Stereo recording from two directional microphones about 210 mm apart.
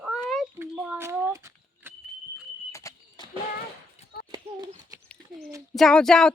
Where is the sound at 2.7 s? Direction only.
15° left (ahead or behind).